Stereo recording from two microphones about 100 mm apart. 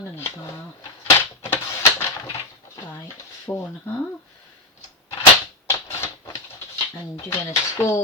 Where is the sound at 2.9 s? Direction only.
30° left (ahead or behind).